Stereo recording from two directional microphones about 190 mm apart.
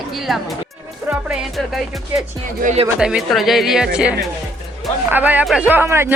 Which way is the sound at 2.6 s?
35° right (ahead or behind).